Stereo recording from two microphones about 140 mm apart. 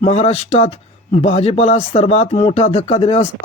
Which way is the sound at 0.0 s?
50° left (ahead or behind).